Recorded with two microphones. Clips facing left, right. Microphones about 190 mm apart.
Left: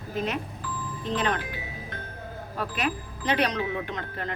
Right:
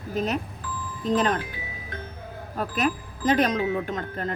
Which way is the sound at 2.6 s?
45° right (ahead or behind).